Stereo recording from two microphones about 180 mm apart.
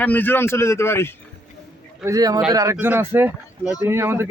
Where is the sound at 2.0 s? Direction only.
20° right (ahead or behind).